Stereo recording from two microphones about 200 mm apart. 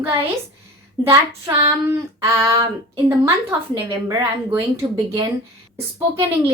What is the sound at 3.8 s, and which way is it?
A woman's voice, 25° right (ahead or behind).